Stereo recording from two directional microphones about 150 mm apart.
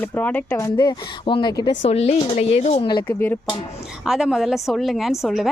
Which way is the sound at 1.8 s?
45° left (ahead or behind).